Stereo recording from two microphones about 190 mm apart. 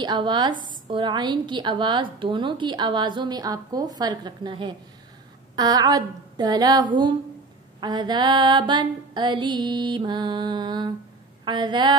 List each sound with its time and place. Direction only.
0.0 s a woman's voice: 25° right (ahead or behind)